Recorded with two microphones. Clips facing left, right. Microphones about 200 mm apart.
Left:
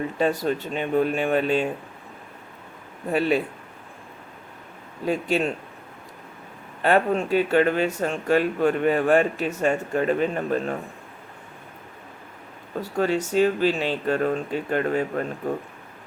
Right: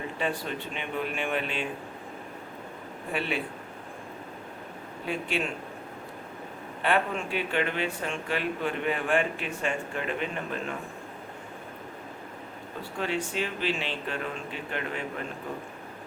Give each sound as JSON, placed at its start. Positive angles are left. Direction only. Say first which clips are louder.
{"t": 0.2, "sound": "a man's voice", "louder": "left 9 dB", "side_deg": 40}
{"t": 3.1, "sound": "a man's voice", "louder": "left 9 dB", "side_deg": 40}
{"t": 5.0, "sound": "a man's voice", "louder": "left 8 dB", "side_deg": 40}
{"t": 6.8, "sound": "a man's voice", "louder": "left 7 dB", "side_deg": 40}
{"t": 12.8, "sound": "a man's voice", "louder": "left 8 dB", "side_deg": 40}